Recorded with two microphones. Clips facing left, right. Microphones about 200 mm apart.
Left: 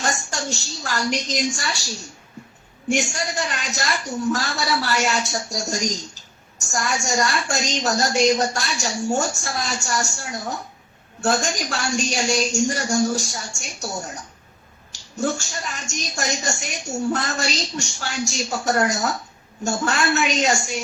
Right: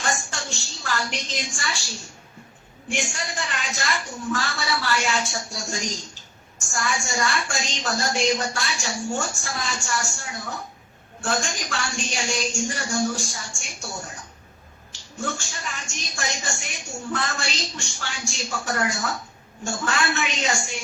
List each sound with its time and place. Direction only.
0.0 s a sound: 40° left (ahead or behind)
2.9 s a woman's voice: 40° left (ahead or behind)
15.2 s a woman's voice: 40° left (ahead or behind)